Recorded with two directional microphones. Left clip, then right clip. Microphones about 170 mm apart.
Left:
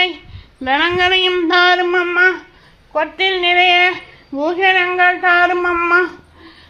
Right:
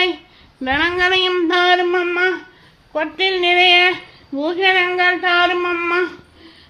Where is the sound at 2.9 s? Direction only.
25° right (ahead or behind); by 5.9 s 10° right (ahead or behind).